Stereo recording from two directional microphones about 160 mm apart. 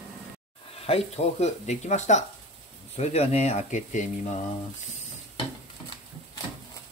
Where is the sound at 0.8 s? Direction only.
40° left (ahead or behind).